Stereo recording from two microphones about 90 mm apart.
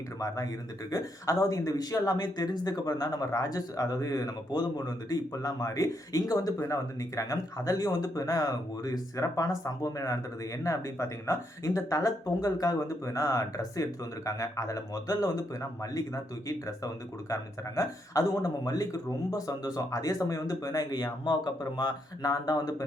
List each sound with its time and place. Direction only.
0.9 s speech: 40° left (ahead or behind)